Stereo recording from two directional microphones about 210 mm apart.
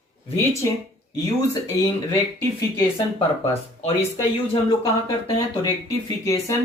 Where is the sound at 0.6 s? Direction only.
15° left (ahead or behind).